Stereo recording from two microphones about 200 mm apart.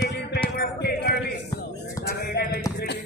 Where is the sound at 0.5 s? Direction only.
55° left (ahead or behind).